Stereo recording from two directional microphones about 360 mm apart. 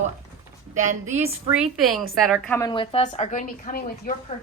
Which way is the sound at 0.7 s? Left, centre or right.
Centre.